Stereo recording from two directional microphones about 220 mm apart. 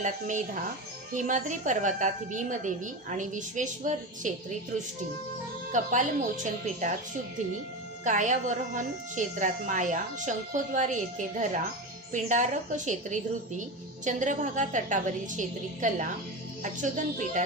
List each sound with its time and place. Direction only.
1.1 s a woman's voice: 35° right (ahead or behind)
5.7 s a woman's voice: 35° right (ahead or behind)
8.0 s a woman's voice: 35° right (ahead or behind)